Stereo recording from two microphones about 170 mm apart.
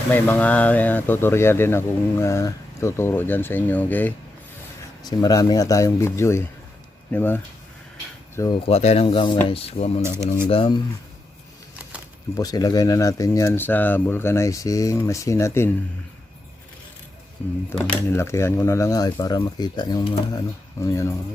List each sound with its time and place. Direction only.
0.1 s speech: 10° left (ahead or behind)
5.0 s speech: 20° left (ahead or behind)
8.6 s speech: 40° left (ahead or behind)
11.8 s a sound: 5° right (ahead or behind)
12.4 s speech: 20° left (ahead or behind)
17.7 s speech: 10° left (ahead or behind)